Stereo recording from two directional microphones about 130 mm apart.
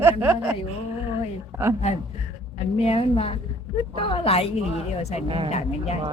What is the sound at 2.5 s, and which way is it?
A woman's voice, 50° left (ahead or behind).